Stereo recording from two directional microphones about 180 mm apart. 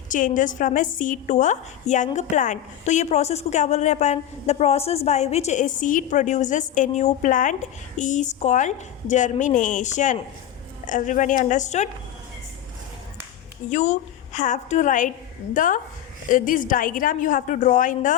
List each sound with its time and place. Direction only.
0.1 s a woman's voice: 45° left (ahead or behind)
13.7 s a woman's voice: 40° left (ahead or behind)